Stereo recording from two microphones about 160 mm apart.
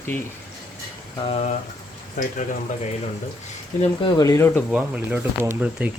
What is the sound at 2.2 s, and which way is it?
Speech, 55° left (ahead or behind).